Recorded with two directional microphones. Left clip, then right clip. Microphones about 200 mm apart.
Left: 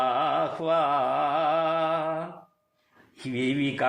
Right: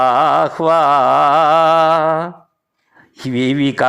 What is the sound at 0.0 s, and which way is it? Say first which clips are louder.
Music: right 13 dB; 35° right (ahead or behind).